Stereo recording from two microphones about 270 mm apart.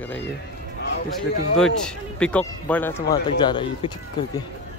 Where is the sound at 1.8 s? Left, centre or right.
Centre.